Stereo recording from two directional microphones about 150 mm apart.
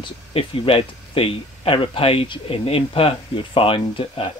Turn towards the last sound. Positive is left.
turn(degrees=35)  # may be behind; listen again after turning